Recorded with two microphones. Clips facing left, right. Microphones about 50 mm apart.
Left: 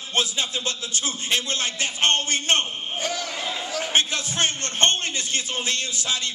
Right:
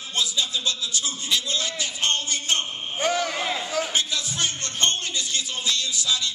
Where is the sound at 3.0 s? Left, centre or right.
Right.